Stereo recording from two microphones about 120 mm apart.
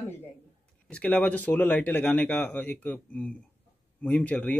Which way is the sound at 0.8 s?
10° left (ahead or behind).